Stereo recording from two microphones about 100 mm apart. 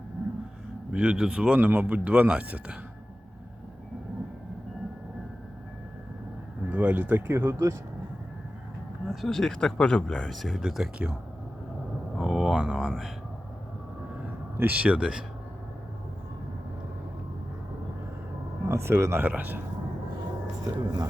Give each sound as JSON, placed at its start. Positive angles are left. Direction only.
{"t": 0.9, "sound": "speech", "side_deg": -10}
{"t": 6.7, "sound": "speech", "side_deg": -15}
{"t": 7.3, "sound": "speech", "side_deg": -30}
{"t": 9.0, "sound": "speech", "side_deg": 0}
{"t": 12.1, "sound": "a sound", "side_deg": -5}
{"t": 12.7, "sound": "speech", "side_deg": 0}
{"t": 14.6, "sound": "speech", "side_deg": -15}
{"t": 18.6, "sound": "speech", "side_deg": -30}
{"t": 20.7, "sound": "speech", "side_deg": -40}